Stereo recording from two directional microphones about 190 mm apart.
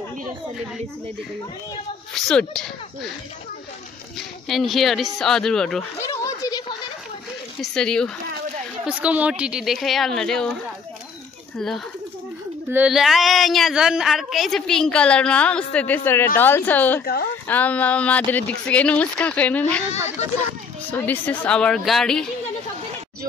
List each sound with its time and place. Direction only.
2.1 s speech: 5° left (ahead or behind)
4.2 s speech: centre (ahead or behind)
5.9 s a sound: 15° left (ahead or behind)
7.6 s speech: 5° left (ahead or behind)
8.8 s speech: 5° right (ahead or behind)
11.5 s speech: centre (ahead or behind)
17.0 s speech: 55° left (ahead or behind)
17.5 s speech: 10° left (ahead or behind)
20.9 s speech: 10° left (ahead or behind)